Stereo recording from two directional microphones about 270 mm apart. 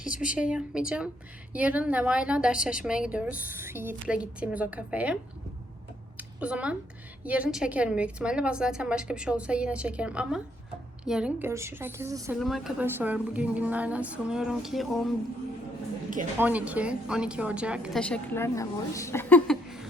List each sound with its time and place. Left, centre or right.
0.3 s a woman's voice: centre
6.1 s a sound: centre
7.3 s a woman's voice: centre
12.4 s a woman's voice: centre
16.4 s a woman's voice: centre